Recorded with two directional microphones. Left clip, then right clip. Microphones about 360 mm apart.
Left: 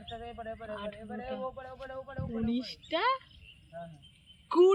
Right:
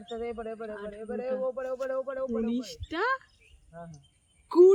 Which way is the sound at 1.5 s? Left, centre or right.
Right.